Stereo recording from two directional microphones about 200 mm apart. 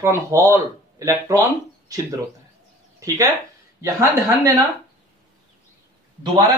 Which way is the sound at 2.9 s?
15° right (ahead or behind).